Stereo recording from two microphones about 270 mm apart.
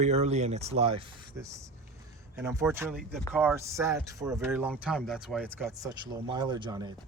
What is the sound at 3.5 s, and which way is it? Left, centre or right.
Speech, centre.